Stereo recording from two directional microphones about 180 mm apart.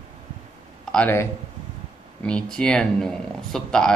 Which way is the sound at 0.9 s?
10° left (ahead or behind).